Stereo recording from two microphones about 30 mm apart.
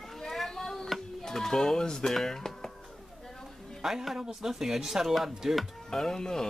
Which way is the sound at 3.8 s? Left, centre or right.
Centre.